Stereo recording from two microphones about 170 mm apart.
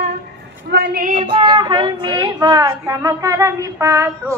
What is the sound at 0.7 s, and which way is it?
Speech, 65° right (ahead or behind).